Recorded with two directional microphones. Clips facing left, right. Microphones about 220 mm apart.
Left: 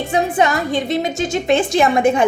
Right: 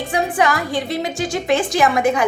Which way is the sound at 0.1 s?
25° left (ahead or behind).